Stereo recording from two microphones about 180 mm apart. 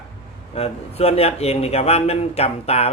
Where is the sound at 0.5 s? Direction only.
35° left (ahead or behind).